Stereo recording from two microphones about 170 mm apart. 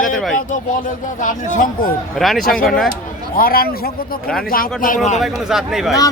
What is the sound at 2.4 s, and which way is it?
Speech, 60° left (ahead or behind).